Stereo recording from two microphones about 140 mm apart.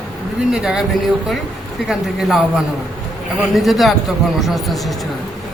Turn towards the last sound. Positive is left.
turn(degrees=0)  # may be behind; listen again after turning